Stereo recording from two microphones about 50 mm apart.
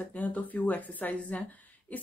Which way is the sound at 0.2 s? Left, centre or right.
Left.